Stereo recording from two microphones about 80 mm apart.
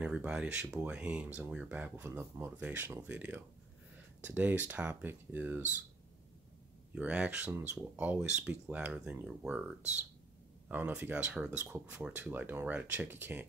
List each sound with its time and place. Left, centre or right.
0.0 s speech: centre
2.0 s speech: right
6.9 s speech: centre
10.7 s speech: centre
12.2 s speech: right